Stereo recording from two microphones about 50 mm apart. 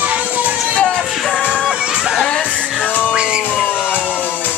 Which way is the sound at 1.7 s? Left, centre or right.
Centre.